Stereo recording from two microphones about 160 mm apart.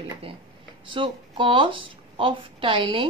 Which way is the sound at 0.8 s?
30° right (ahead or behind).